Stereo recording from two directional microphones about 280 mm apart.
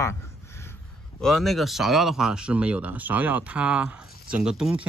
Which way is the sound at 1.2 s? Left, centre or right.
Centre.